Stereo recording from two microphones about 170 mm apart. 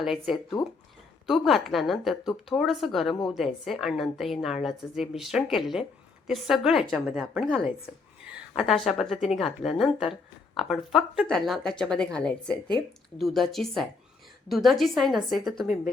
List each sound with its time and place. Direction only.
0.0 s a woman's voice: centre (ahead or behind)
0.5 s speech: 25° left (ahead or behind)
1.3 s a woman's voice: centre (ahead or behind)
8.5 s a woman's voice: centre (ahead or behind)